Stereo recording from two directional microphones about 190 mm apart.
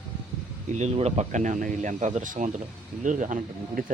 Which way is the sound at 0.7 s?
35° right (ahead or behind).